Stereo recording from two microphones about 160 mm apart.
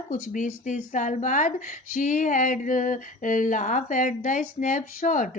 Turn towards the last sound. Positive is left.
turn(degrees=55)  # may be behind; listen again after turning